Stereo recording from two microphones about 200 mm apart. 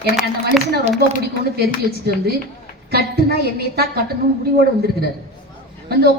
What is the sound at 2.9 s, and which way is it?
A woman's voice, 50° right (ahead or behind).